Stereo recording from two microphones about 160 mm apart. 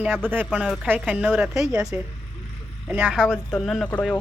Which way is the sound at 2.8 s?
5° right (ahead or behind).